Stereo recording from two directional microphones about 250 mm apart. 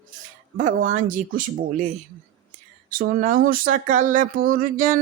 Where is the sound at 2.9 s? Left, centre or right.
Right.